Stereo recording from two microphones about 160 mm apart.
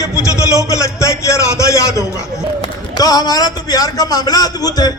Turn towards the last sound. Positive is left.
turn(degrees=25)  # may be behind; listen again after turning